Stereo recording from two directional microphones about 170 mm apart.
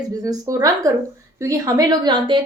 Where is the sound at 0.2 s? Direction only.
20° right (ahead or behind).